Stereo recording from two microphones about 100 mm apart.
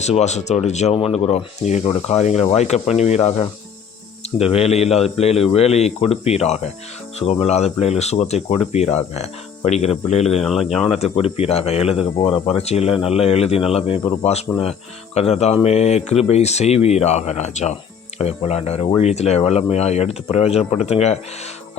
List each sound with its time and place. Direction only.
0.0 s speech: 90° left
10.4 s speech: centre (ahead or behind)
11.0 s speech: 80° left
12.2 s speech: 65° left (ahead or behind); by 17.2 s 90° left
18.2 s speech: 90° left